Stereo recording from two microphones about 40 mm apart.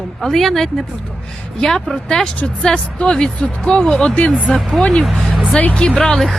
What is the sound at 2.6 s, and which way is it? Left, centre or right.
A woman's voice, centre.